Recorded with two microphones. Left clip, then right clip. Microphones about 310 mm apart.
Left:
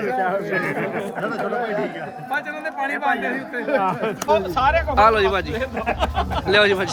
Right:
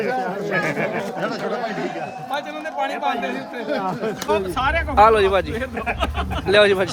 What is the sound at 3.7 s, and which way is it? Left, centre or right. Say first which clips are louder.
Speech: left 4 dB; left.